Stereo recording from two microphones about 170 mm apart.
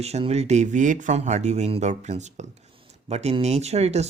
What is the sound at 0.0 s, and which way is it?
Speech, 40° right (ahead or behind).